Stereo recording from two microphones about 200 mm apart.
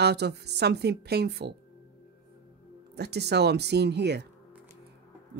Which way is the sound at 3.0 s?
55° right (ahead or behind).